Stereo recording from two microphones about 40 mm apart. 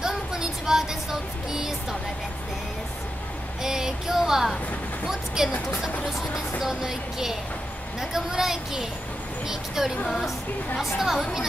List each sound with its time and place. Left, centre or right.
0.0 s a sound: centre
3.6 s child singing: centre
5.4 s speech: centre